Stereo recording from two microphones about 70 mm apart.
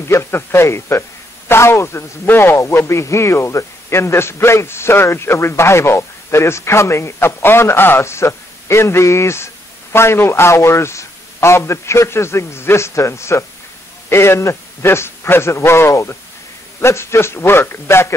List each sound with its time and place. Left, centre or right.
0.0 s a man's voice: left